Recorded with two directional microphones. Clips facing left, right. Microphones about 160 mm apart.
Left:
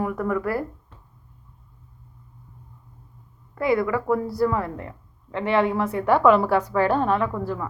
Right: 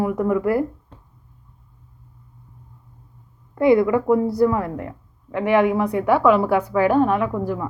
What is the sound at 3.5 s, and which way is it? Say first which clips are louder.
A woman's voice: right 6 dB; 20° right (ahead or behind).